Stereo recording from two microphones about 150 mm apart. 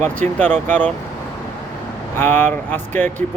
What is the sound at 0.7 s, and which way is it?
Speech, 10° left (ahead or behind).